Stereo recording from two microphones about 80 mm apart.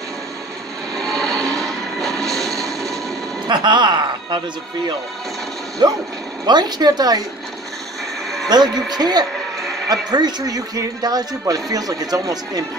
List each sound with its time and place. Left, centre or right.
0.9 s vehicle: centre
3.4 s speech: right
5.8 s a woman's voice: right
8.5 s a woman's voice: right